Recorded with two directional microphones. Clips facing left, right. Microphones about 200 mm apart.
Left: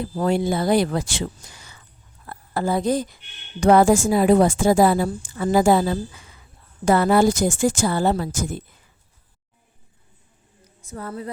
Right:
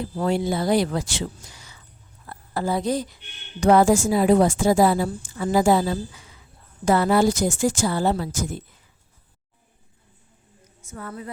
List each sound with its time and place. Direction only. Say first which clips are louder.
0.2 s a woman's voice: left 2 dB; 50° left (ahead or behind)
2.2 s a sound: left 2 dB; 55° left (ahead or behind)
3.6 s a woman's voice: left 2 dB; 55° left (ahead or behind)
10.8 s speech: left 3 dB; 35° left (ahead or behind)